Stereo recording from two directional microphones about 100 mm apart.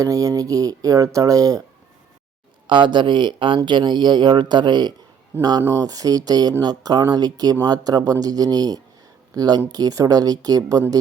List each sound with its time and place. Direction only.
0.0 s speech: 35° right (ahead or behind)
2.6 s speech: 50° right (ahead or behind)